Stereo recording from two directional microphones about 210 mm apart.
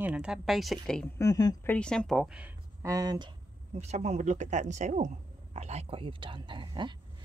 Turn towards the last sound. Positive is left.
turn(degrees=-20)  # may be behind; listen again after turning